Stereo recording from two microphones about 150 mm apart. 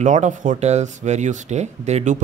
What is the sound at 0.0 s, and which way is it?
Speech, 55° right (ahead or behind).